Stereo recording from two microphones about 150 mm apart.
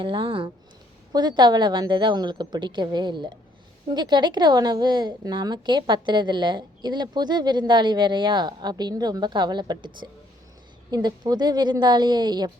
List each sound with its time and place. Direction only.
0.0 s a woman's voice: 35° right (ahead or behind)